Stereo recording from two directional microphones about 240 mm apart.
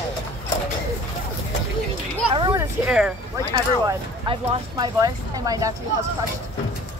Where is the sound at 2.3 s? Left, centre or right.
Centre.